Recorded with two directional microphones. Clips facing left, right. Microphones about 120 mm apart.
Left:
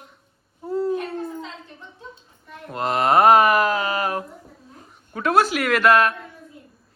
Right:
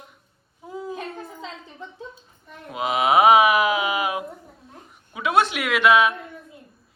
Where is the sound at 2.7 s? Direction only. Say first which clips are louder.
Left 1 dB; 5° right (ahead or behind).